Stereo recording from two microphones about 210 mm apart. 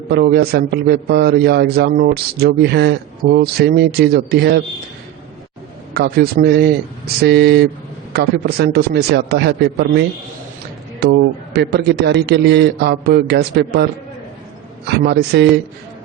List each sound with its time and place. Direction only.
0.1 s a man's voice: 45° right (ahead or behind)
5.9 s a man's voice: 50° right (ahead or behind)
14.8 s a man's voice: 50° right (ahead or behind)